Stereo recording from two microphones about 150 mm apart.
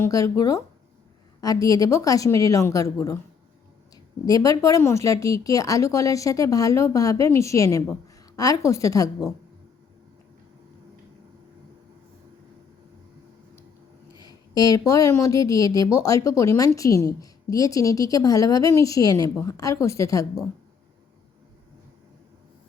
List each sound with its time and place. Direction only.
0.0 s a woman's voice: 25° left (ahead or behind)
4.3 s a woman's voice: 25° left (ahead or behind)
14.2 s a woman's voice: 25° left (ahead or behind)